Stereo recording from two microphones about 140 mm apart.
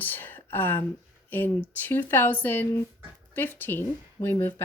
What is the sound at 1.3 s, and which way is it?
Speech, 15° left (ahead or behind).